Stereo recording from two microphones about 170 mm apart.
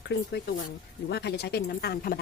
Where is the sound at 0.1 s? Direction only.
75° left (ahead or behind).